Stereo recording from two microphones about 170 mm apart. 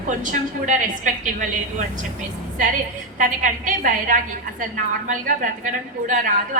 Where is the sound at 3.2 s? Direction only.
50° right (ahead or behind).